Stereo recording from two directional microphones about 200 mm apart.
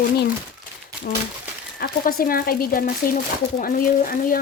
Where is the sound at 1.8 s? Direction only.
45° left (ahead or behind).